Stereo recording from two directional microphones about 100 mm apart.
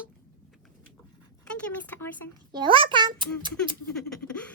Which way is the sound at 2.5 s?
50° right (ahead or behind).